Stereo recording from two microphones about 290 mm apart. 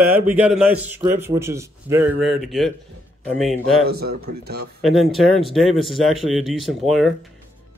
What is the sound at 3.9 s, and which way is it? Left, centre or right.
Speech, right.